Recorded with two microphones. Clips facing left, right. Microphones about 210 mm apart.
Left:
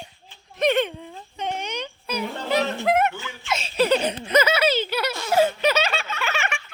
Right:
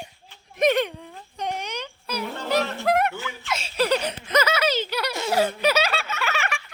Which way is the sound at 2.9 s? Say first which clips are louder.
Even; centre (ahead or behind).